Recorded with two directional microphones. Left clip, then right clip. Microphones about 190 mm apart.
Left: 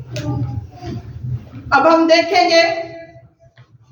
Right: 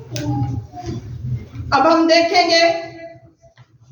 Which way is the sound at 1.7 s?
Centre (ahead or behind).